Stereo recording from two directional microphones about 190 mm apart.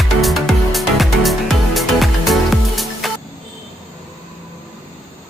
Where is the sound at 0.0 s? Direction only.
Centre (ahead or behind).